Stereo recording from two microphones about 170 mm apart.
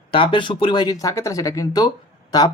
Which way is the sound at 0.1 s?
30° left (ahead or behind).